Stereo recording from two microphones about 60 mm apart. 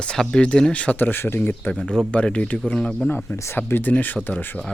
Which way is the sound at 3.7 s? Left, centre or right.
Left.